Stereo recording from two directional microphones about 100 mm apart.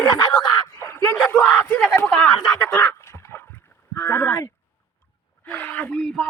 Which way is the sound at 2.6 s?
25° left (ahead or behind).